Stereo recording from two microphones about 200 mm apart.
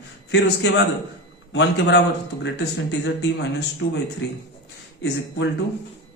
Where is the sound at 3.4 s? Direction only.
60° left (ahead or behind).